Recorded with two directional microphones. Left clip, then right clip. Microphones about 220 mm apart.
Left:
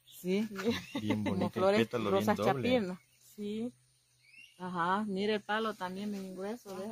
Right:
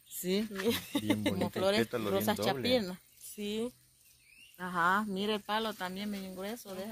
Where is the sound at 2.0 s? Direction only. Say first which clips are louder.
Left 2 dB; 20° right (ahead or behind).